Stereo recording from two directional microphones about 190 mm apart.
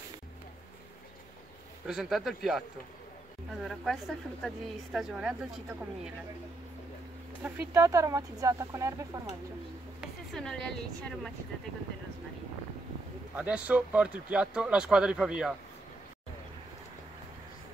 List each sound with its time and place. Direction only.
1.9 s speech: centre (ahead or behind)
7.4 s speech: 15° right (ahead or behind)
9.9 s speech: centre (ahead or behind)
13.4 s speech: 5° right (ahead or behind)